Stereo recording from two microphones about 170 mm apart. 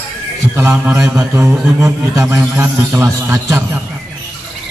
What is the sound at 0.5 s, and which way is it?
A man's voice, 15° right (ahead or behind).